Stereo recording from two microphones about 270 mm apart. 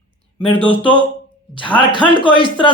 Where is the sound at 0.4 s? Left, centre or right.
Centre.